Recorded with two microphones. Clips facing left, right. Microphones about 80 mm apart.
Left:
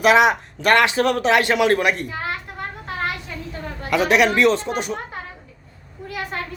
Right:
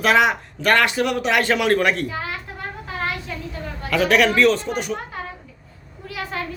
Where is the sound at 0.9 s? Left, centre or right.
Left.